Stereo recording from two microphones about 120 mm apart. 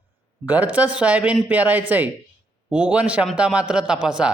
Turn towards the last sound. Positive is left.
turn(degrees=-5)  # may be behind; listen again after turning